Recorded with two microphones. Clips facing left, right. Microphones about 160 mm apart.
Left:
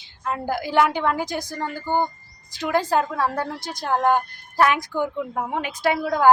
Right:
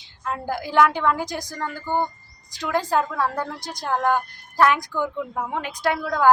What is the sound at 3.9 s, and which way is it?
A woman's voice, 25° left (ahead or behind).